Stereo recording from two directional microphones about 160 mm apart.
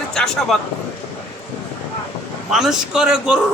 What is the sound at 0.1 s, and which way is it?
Speech, 5° left (ahead or behind).